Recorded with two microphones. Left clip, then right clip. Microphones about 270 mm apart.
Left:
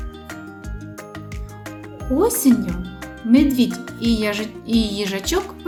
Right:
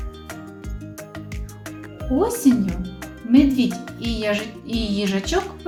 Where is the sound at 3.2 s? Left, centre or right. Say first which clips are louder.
Left 1 dB; left.